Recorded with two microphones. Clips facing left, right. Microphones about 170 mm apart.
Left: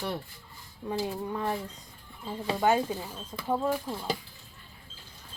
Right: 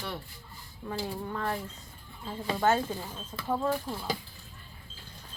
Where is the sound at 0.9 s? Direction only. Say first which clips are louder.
Left 3 dB; 15° left (ahead or behind).